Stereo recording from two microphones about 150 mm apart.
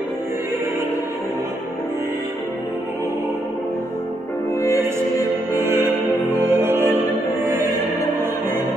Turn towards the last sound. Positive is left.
turn(degrees=-15)  # may be behind; listen again after turning